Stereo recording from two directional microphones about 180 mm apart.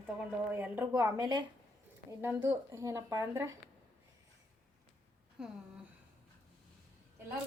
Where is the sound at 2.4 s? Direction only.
20° right (ahead or behind).